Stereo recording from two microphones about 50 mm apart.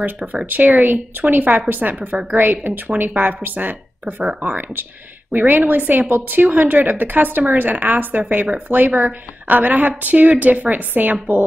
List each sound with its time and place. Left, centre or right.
0.5 s a woman's voice: right
4.0 s speech: right
5.5 s a woman's voice: right